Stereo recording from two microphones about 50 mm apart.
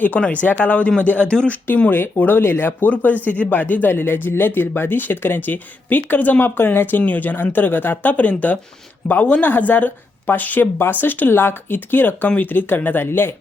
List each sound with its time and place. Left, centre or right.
0.1 s speech: left
1.5 s speech: left
2.8 s speech: left
10.8 s speech: left